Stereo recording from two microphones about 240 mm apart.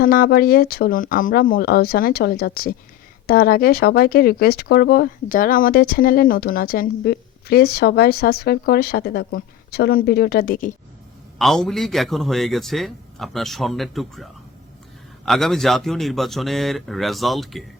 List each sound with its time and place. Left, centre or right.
0.0 s speech: left
11.3 s speech: centre